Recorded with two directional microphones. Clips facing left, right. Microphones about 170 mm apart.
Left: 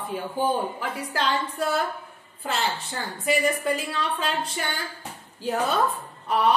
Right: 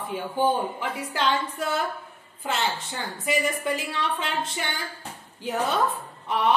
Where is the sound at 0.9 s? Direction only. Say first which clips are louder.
Right 1 dB; 20° right (ahead or behind).